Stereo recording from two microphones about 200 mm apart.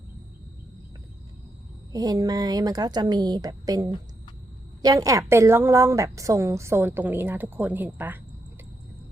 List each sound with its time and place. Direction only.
1.9 s a woman's voice: 20° right (ahead or behind)